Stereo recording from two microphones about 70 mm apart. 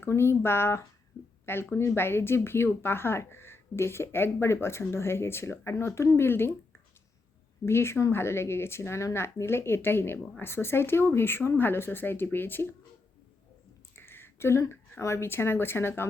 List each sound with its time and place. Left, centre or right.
0.0 s speech: left
7.6 s speech: left
13.9 s a sound: left
14.7 s speech: left